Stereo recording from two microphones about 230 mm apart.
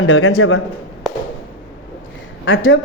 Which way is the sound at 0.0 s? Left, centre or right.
Left.